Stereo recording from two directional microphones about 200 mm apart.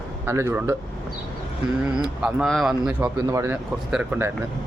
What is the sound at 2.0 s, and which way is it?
Speech, 5° right (ahead or behind).